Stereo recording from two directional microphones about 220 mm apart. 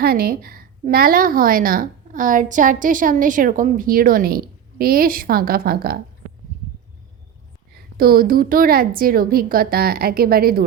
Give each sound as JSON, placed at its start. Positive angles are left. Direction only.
{"t": 0.0, "sound": "a woman's voice", "side_deg": -45}
{"t": 7.9, "sound": "a woman's voice", "side_deg": -45}